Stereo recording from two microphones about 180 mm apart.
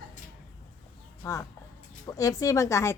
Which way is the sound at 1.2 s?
15° left (ahead or behind).